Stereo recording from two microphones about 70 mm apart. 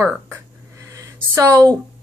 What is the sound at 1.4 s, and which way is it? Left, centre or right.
Speech, right.